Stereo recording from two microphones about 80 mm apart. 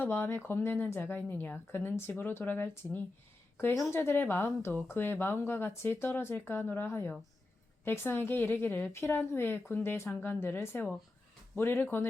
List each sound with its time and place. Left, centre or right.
0.0 s a woman's voice: left